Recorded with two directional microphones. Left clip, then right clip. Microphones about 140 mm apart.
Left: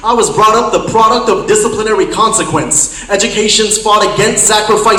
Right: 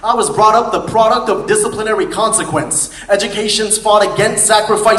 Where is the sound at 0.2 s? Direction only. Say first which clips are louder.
Left 1 dB; 45° right (ahead or behind).